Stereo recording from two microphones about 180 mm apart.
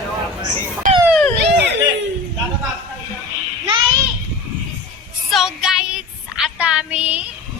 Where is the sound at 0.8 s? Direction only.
50° right (ahead or behind).